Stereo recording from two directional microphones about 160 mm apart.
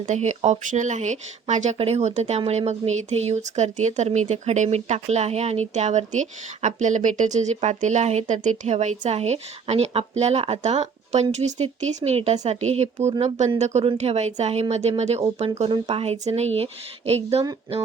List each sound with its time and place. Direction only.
0.0 s speech: 45° right (ahead or behind)